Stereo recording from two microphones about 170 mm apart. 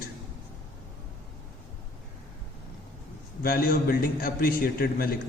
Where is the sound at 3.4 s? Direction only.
60° left (ahead or behind).